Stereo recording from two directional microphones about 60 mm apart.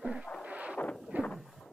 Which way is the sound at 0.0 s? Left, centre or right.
Centre.